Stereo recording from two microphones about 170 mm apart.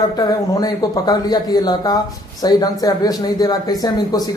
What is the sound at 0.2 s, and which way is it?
Speech, 20° left (ahead or behind).